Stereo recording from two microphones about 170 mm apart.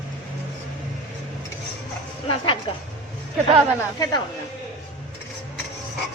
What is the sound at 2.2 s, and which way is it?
Speech, 30° left (ahead or behind).